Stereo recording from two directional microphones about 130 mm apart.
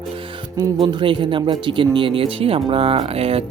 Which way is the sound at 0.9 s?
40° right (ahead or behind).